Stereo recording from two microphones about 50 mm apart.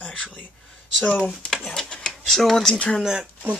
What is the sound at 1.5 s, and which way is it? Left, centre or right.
Speech, centre.